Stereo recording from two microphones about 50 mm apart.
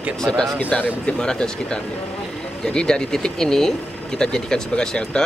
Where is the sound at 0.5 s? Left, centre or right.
Left.